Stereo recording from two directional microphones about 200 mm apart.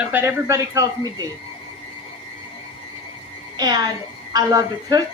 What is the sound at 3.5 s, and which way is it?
A woman's voice, 20° right (ahead or behind).